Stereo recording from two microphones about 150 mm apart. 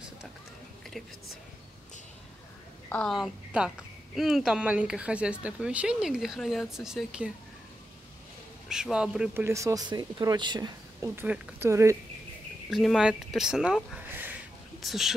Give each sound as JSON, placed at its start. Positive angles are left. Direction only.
{"t": 2.9, "sound": "a woman's voice", "side_deg": 5}
{"t": 3.2, "sound": "a woman's voice", "side_deg": -5}
{"t": 8.6, "sound": "a man's voice", "side_deg": -5}
{"t": 9.3, "sound": "speech", "side_deg": -20}
{"t": 11.1, "sound": "speech", "side_deg": -15}
{"t": 12.6, "sound": "a woman's voice", "side_deg": 0}